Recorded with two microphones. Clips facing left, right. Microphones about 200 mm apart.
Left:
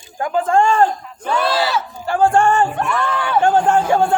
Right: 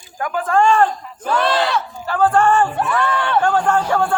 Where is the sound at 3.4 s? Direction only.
25° left (ahead or behind).